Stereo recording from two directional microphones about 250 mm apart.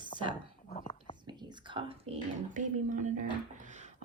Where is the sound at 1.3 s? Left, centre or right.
Centre.